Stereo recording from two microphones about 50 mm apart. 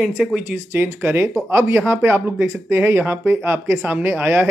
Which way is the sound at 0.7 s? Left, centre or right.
Right.